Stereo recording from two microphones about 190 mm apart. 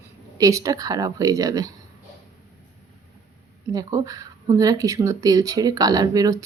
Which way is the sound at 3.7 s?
20° right (ahead or behind).